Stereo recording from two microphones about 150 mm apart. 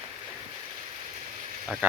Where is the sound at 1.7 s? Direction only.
5° right (ahead or behind).